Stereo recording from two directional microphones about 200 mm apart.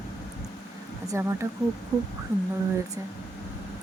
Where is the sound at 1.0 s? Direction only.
15° right (ahead or behind).